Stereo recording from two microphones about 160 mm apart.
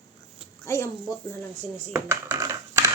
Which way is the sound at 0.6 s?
15° left (ahead or behind).